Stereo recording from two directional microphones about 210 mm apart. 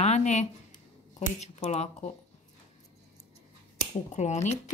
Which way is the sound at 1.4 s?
35° left (ahead or behind).